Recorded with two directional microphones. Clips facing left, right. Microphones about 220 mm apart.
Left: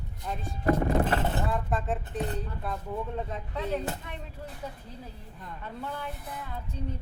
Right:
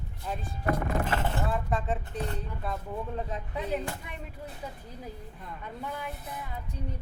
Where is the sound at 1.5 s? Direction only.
Centre (ahead or behind).